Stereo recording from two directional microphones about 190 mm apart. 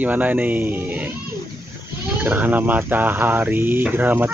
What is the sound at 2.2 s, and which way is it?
Speech, 10° right (ahead or behind).